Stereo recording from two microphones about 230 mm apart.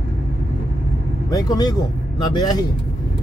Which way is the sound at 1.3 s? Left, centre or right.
Centre.